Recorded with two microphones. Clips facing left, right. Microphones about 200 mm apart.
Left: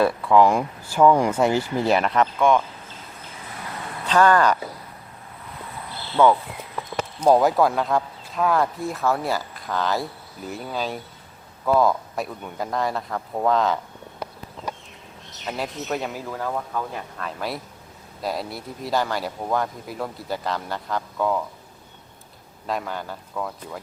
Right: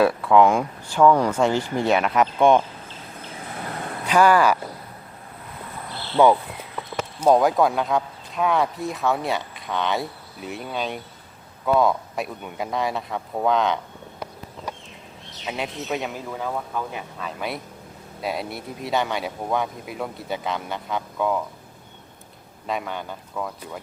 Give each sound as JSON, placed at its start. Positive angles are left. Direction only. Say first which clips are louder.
{"t": 0.0, "sound": "speech", "louder": "right 1 dB", "side_deg": 0}
{"t": 1.0, "sound": "speech", "louder": "even", "side_deg": 10}
{"t": 2.4, "sound": "speech", "louder": "right 3 dB", "side_deg": -25}
{"t": 4.0, "sound": "speech", "louder": "right 1 dB", "side_deg": -10}
{"t": 6.2, "sound": "speech", "louder": "right 1 dB", "side_deg": -15}
{"t": 7.3, "sound": "speech", "louder": "even", "side_deg": 5}
{"t": 15.4, "sound": "speech", "louder": "even", "side_deg": 0}
{"t": 22.6, "sound": "speech", "louder": "even", "side_deg": 0}